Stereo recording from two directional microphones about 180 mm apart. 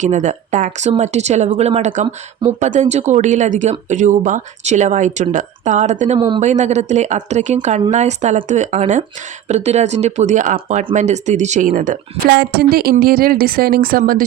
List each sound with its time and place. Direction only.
0.0 s speech: 40° right (ahead or behind)
6.1 s speech: 25° right (ahead or behind)
6.4 s speech: 40° right (ahead or behind)
12.3 s a woman's voice: 60° right (ahead or behind)